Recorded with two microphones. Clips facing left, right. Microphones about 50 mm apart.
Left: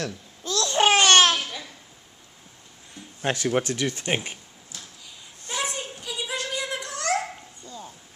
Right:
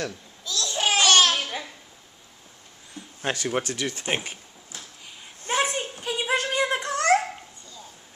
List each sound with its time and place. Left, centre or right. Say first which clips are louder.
0.4 s babbling: left 6 dB; left
1.4 s babbling: right 3 dB; centre
3.3 s speech: left 3 dB; centre
5.0 s a sound: right 6 dB; right
7.6 s bow-wow: left 5 dB; left